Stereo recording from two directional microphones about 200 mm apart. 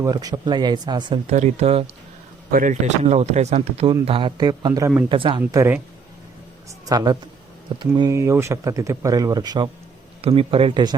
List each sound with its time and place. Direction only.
0.0 s speech: 20° right (ahead or behind)
5.4 s speech: 10° right (ahead or behind)
6.8 s speech: 20° right (ahead or behind)